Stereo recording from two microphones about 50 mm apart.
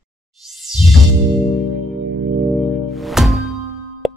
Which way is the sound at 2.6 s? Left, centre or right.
Centre.